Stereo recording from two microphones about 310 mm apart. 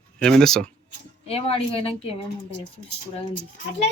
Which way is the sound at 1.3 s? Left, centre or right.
Centre.